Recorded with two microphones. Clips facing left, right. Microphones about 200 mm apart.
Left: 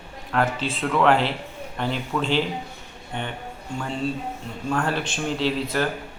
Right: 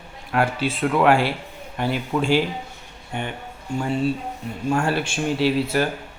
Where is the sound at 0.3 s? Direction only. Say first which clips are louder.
Right 2 dB; 10° right (ahead or behind).